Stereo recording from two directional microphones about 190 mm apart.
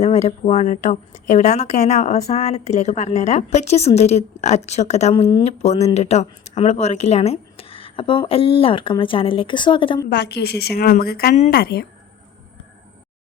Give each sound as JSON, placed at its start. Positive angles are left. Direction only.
{"t": 0.0, "sound": "speech", "side_deg": 35}
{"t": 10.2, "sound": "speech", "side_deg": 60}
{"t": 11.3, "sound": "speech", "side_deg": 40}
{"t": 11.6, "sound": "speech", "side_deg": 55}